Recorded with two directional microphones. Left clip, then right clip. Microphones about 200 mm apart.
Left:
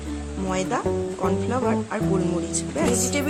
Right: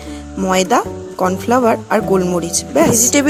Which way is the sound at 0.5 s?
40° right (ahead or behind).